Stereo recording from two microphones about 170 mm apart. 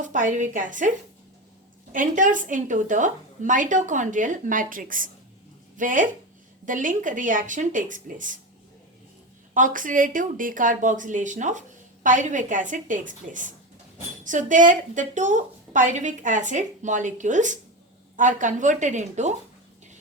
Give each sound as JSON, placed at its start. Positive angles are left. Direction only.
{"t": 0.0, "sound": "a woman's voice", "side_deg": -50}
{"t": 9.6, "sound": "a woman's voice", "side_deg": -50}